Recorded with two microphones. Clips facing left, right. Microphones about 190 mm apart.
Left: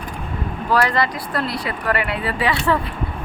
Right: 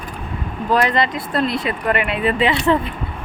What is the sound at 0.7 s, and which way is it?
Speech, 20° right (ahead or behind).